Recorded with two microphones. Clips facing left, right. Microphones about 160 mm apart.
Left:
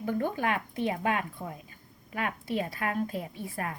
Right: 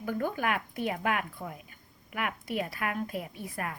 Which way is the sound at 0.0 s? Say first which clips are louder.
Left 1 dB; 25° left (ahead or behind).